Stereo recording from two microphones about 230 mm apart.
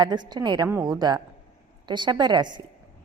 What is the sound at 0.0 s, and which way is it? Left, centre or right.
A woman's voice, centre.